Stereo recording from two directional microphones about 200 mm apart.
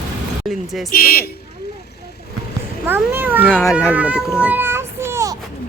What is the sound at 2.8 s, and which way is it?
Speech, 10° right (ahead or behind).